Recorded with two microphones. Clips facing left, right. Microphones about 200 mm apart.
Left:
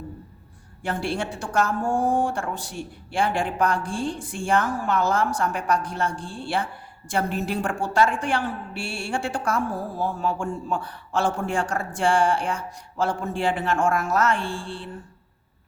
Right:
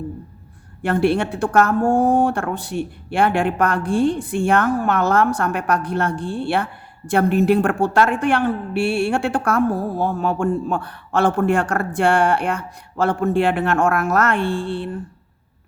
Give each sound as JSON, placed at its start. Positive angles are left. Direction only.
{"t": 0.8, "sound": "a woman's voice", "side_deg": -60}